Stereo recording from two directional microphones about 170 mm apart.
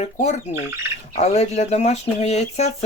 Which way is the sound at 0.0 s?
40° left (ahead or behind).